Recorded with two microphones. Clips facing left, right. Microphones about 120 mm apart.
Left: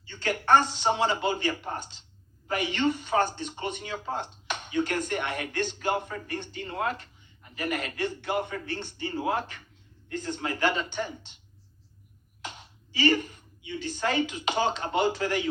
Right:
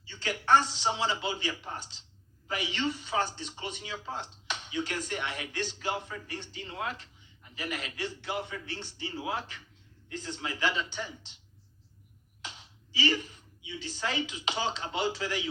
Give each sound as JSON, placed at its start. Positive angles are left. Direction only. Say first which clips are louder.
{"t": 0.0, "sound": "a man's voice", "louder": "left 5 dB", "side_deg": 50}
{"t": 12.4, "sound": "speech", "louder": "left 5 dB", "side_deg": 50}